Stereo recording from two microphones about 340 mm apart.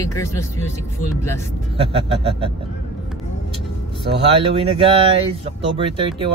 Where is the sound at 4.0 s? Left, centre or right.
Centre.